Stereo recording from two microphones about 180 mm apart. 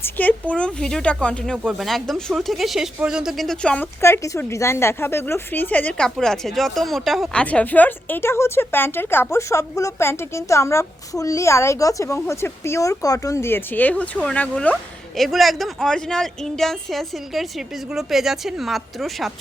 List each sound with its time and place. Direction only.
0.0 s speech: 10° left (ahead or behind)